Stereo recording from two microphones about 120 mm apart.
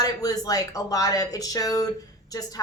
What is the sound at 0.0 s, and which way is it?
Speech, 30° left (ahead or behind).